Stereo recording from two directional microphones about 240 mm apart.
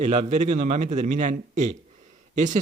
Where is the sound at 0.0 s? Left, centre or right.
Right.